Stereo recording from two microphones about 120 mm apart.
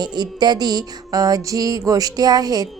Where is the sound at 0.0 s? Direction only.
35° right (ahead or behind).